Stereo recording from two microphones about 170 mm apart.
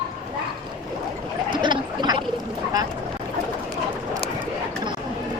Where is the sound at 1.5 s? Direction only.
25° right (ahead or behind).